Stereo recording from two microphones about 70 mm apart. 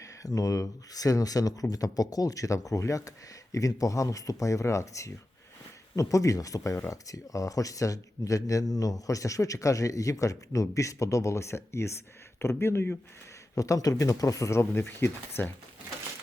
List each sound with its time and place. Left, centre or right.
0.0 s speech: left
13.6 s speech: left